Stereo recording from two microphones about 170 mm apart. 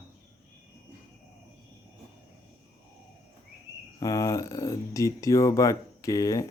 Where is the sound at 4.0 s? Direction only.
20° left (ahead or behind).